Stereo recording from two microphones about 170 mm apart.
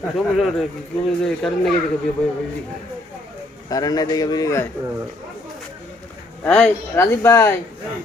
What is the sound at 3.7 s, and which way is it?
Speech, 20° left (ahead or behind).